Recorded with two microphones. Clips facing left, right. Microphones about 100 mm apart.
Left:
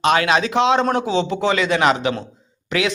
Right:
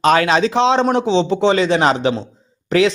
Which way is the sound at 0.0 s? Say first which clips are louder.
Right 3 dB; 35° right (ahead or behind).